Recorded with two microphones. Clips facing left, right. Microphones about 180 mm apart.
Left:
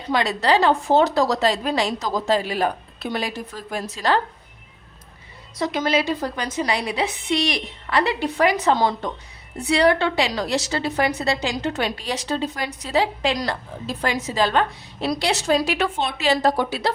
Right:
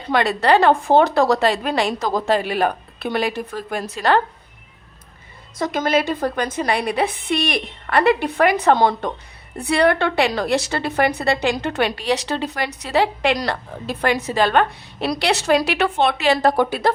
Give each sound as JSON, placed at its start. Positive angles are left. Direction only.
{"t": 0.1, "sound": "a woman's voice", "side_deg": -55}
{"t": 5.5, "sound": "a woman's voice", "side_deg": -50}